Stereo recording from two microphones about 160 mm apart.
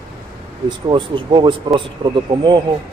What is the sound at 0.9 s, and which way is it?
Speech, 30° right (ahead or behind).